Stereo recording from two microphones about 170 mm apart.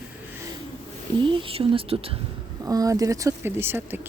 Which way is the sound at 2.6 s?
20° right (ahead or behind).